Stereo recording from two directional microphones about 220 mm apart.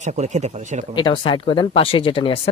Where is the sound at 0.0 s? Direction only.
35° right (ahead or behind).